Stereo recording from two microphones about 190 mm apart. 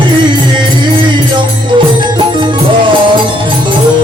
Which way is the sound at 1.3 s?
25° right (ahead or behind).